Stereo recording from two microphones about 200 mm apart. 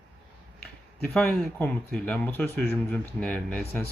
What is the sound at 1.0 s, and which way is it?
Speech, 10° left (ahead or behind).